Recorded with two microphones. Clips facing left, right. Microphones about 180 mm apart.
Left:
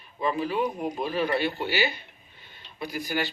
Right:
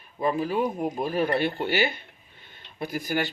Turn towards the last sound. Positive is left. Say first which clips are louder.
# right 2 dB
turn(degrees=-50)  # may be behind; listen again after turning